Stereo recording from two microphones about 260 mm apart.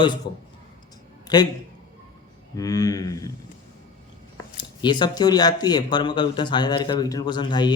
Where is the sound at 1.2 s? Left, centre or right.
Centre.